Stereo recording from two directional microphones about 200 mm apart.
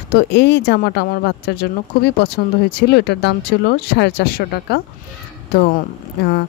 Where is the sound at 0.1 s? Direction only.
55° left (ahead or behind).